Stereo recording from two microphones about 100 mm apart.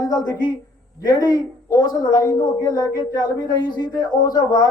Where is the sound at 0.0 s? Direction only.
40° left (ahead or behind).